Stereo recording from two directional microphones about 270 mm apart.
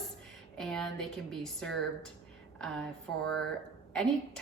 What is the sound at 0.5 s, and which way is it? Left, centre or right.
A woman's voice, centre.